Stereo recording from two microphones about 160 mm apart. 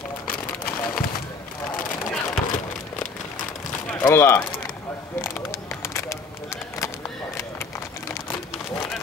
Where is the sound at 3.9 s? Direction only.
20° left (ahead or behind).